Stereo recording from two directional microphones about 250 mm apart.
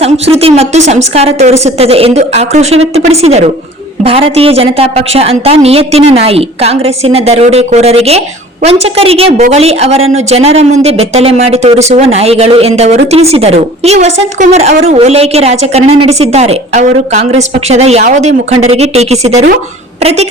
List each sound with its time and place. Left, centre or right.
0.0 s a woman's voice: right